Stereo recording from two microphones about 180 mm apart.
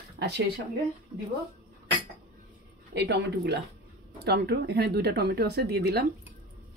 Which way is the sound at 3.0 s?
70° right (ahead or behind).